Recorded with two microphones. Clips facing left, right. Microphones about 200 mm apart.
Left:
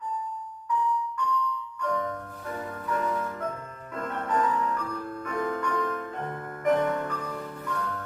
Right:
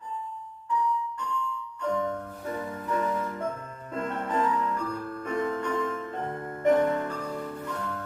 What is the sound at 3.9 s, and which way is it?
Music, 25° right (ahead or behind).